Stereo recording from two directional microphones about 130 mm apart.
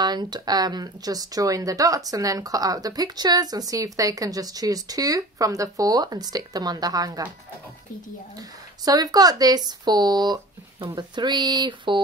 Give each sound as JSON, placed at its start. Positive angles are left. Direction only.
{"t": 0.0, "sound": "speech", "side_deg": -30}
{"t": 8.4, "sound": "speech", "side_deg": -30}